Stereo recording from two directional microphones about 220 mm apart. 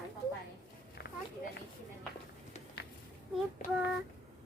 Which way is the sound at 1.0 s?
50° left (ahead or behind).